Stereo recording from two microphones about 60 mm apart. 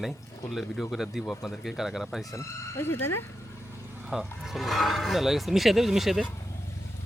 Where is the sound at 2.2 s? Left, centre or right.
Left.